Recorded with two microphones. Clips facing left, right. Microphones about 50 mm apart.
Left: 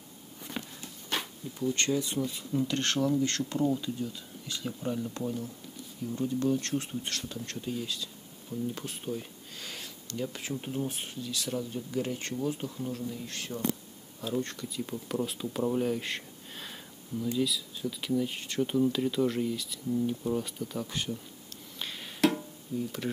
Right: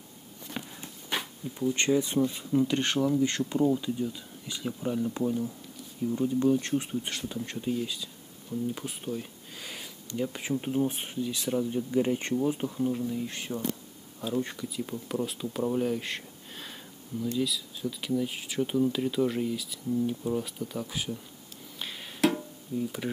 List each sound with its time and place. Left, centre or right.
0.5 s walk: centre
0.8 s speech: centre
21.7 s music: centre